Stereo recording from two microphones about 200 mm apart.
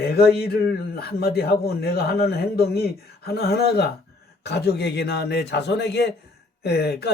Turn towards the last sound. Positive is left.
turn(degrees=55)  # may be behind; listen again after turning